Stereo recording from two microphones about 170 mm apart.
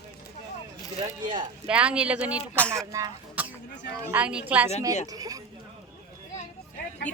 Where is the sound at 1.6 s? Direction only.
5° right (ahead or behind).